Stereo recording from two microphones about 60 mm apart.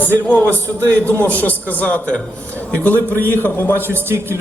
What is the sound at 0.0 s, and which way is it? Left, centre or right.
A man's voice, left.